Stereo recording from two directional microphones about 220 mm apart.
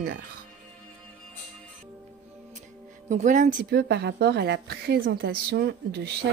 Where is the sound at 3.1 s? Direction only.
35° right (ahead or behind).